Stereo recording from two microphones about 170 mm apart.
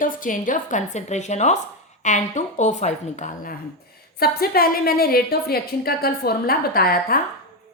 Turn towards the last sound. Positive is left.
turn(degrees=60)  # may be behind; listen again after turning